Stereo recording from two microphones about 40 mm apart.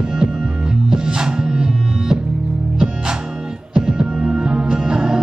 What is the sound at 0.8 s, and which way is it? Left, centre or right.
Music, centre.